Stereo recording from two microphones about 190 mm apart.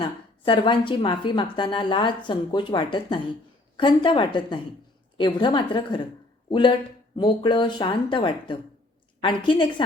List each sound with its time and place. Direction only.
0.0 s a woman's voice: 25° left (ahead or behind)